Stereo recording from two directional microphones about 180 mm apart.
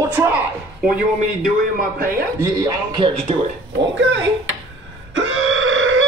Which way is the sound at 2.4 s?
25° right (ahead or behind).